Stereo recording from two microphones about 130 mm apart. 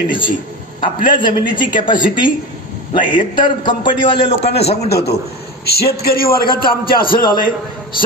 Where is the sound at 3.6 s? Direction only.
40° left (ahead or behind).